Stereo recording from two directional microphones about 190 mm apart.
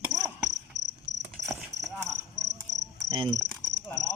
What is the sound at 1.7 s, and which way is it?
Cricket, 65° right (ahead or behind).